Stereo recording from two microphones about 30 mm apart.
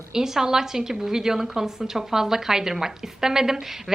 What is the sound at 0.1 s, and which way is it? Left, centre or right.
A woman's voice, centre.